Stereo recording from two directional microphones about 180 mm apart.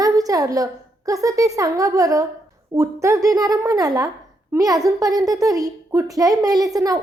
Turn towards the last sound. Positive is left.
turn(degrees=-20)  # may be behind; listen again after turning